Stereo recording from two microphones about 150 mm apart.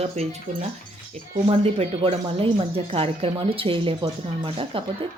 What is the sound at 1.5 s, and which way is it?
A woman's voice, 45° right (ahead or behind).